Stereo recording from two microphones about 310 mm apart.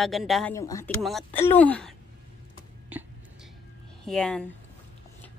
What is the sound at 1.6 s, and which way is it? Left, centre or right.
Speech, centre.